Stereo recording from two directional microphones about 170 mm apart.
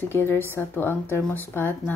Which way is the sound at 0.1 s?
15° left (ahead or behind).